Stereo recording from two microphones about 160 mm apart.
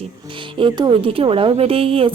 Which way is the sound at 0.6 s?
30° right (ahead or behind).